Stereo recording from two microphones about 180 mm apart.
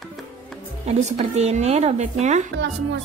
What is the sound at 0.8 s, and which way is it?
Speech, 35° right (ahead or behind).